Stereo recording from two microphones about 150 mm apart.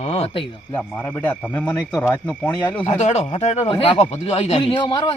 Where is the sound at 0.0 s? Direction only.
45° left (ahead or behind).